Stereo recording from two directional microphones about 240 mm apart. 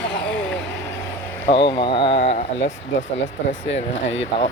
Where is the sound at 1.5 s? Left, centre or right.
Left.